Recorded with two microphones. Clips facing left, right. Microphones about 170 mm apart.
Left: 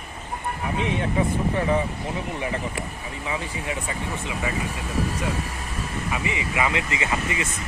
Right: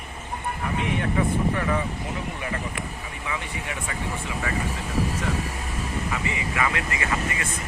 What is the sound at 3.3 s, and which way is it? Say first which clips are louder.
Speech: left 3 dB; 25° left (ahead or behind).